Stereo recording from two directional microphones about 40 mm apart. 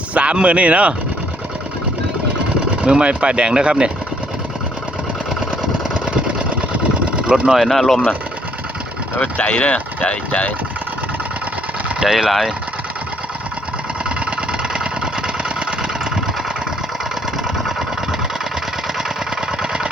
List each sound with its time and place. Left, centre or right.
0.1 s speech: right
2.8 s speech: right
6.1 s engine: right
7.5 s speech: centre
9.4 s speech: left
12.0 s speech: centre
14.0 s engine: right
19.0 s engine: centre